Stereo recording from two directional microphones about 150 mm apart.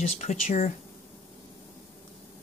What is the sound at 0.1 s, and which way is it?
Speech, 50° left (ahead or behind).